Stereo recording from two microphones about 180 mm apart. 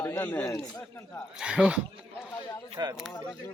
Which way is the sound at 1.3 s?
5° right (ahead or behind).